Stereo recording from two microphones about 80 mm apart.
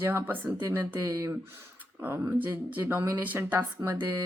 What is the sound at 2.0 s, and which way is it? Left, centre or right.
Speech, right.